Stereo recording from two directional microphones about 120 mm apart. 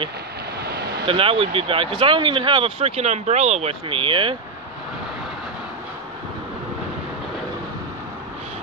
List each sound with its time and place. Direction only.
1.0 s speech: 50° right (ahead or behind)